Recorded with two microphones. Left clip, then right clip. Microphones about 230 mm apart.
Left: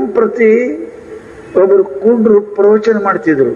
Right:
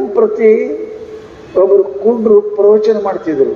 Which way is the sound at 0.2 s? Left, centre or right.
Left.